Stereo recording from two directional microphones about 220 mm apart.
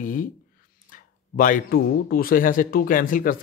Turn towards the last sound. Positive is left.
turn(degrees=40)  # may be behind; listen again after turning